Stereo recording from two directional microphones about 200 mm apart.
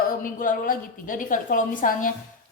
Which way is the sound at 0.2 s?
45° left (ahead or behind).